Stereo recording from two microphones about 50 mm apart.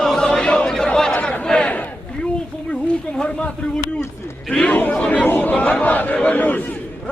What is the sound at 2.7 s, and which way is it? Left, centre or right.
A man's voice, left.